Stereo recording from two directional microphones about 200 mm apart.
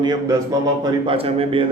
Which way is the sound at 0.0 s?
20° right (ahead or behind).